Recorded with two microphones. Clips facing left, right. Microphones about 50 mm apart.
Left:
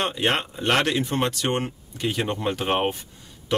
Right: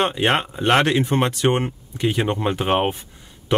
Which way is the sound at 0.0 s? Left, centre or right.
Right.